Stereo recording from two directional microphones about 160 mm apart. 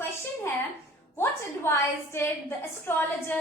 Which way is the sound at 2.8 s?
10° left (ahead or behind).